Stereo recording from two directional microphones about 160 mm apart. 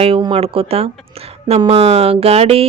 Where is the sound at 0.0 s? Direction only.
35° right (ahead or behind).